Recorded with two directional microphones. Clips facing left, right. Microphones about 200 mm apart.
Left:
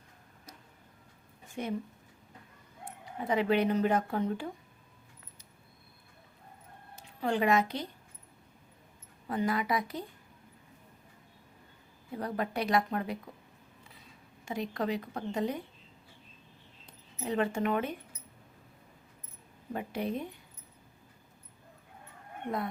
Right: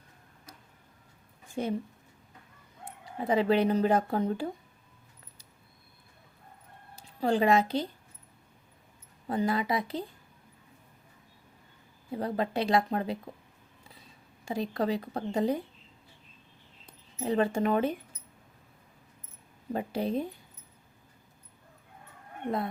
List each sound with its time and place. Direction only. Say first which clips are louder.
1.6 s speech: right 5 dB; 35° right (ahead or behind)
3.2 s speech: right 3 dB; 30° right (ahead or behind)
6.9 s a woman's voice: right 4 dB; 35° right (ahead or behind)
9.2 s speech: right 2 dB; 30° right (ahead or behind)
12.1 s speech: right 3 dB; 25° right (ahead or behind)
14.4 s speech: right 3 dB; 30° right (ahead or behind)
17.2 s speech: right 3 dB; 35° right (ahead or behind)
19.7 s speech: right 4 dB; 30° right (ahead or behind)